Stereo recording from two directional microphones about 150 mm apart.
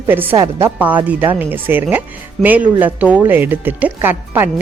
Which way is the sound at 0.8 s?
10° right (ahead or behind).